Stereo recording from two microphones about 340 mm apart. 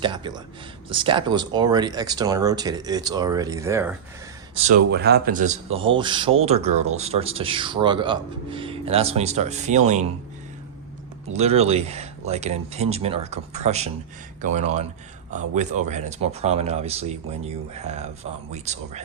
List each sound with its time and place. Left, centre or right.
0.0 s speech: centre
4.9 s speech: right
11.3 s speech: centre